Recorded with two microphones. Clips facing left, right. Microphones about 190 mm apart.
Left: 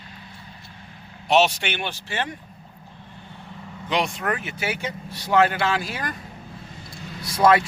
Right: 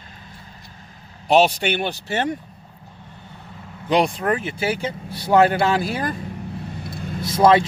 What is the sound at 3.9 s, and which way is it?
Speech, 35° right (ahead or behind).